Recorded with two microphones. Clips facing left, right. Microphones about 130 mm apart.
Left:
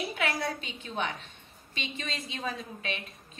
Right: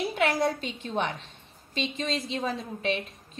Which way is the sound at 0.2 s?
35° right (ahead or behind).